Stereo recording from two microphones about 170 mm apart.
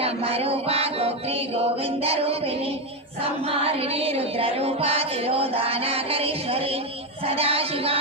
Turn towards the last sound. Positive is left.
turn(degrees=-35)  # may be behind; listen again after turning